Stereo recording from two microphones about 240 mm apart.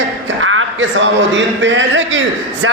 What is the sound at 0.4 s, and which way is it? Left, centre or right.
A man's voice, right.